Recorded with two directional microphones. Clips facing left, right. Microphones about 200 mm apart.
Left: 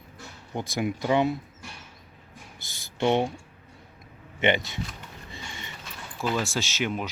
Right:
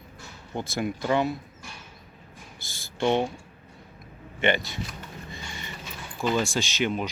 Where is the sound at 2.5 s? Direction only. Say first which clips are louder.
Even; 20° left (ahead or behind).